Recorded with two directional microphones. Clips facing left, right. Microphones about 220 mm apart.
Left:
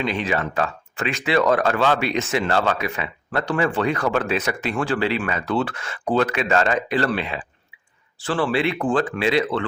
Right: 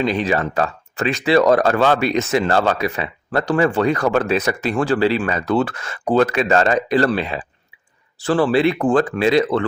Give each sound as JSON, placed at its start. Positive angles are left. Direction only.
{"t": 0.0, "sound": "speech", "side_deg": -35}